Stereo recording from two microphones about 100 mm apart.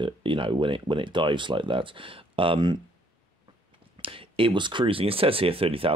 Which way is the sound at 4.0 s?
65° right (ahead or behind).